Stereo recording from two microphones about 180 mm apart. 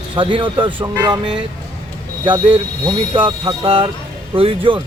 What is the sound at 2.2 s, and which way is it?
Speech, 25° right (ahead or behind).